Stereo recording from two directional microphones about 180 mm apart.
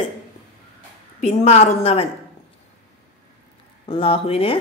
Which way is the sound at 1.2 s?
35° left (ahead or behind).